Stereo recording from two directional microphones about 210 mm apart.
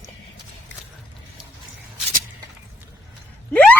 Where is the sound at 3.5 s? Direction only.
10° left (ahead or behind).